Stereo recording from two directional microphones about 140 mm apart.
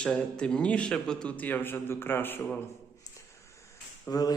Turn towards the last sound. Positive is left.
turn(degrees=25)  # may be behind; listen again after turning